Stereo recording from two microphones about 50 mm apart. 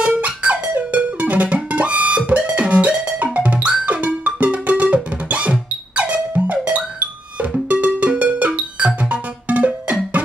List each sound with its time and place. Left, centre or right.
0.2 s music: right